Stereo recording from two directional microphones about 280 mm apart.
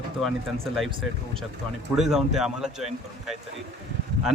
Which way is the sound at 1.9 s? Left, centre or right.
Centre.